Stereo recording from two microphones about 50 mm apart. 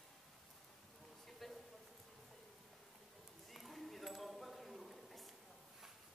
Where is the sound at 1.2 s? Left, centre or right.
Centre.